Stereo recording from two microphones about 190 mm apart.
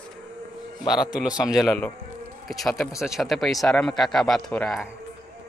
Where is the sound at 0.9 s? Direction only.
Centre (ahead or behind).